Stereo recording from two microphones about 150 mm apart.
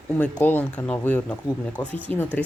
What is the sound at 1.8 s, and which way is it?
Speech, 30° left (ahead or behind).